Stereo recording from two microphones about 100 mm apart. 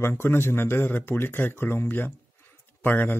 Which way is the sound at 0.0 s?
25° left (ahead or behind).